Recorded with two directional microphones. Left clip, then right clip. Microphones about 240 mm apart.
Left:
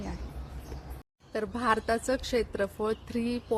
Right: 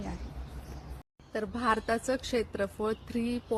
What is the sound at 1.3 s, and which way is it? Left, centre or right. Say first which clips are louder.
Speech: left 2 dB; centre.